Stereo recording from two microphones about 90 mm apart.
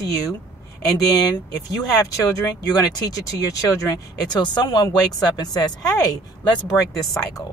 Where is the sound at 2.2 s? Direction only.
30° left (ahead or behind).